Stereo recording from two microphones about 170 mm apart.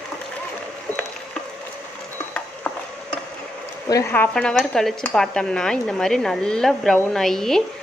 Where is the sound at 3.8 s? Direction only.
15° left (ahead or behind).